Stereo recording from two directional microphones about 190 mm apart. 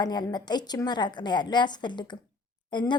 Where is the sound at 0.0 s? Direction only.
20° left (ahead or behind).